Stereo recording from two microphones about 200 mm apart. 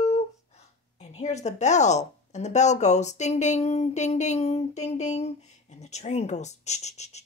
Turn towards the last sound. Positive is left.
turn(degrees=35)  # may be behind; listen again after turning